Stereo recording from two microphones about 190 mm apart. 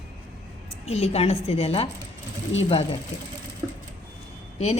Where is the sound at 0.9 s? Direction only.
35° left (ahead or behind).